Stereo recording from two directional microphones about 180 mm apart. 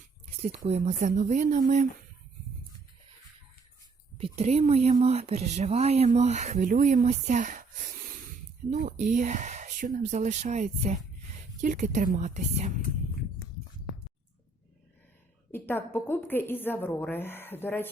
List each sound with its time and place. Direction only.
0.3 s a sound: 35° right (ahead or behind)
0.7 s speech: 40° right (ahead or behind)
4.2 s speech: 35° right (ahead or behind)
15.5 s a woman's voice: 10° left (ahead or behind)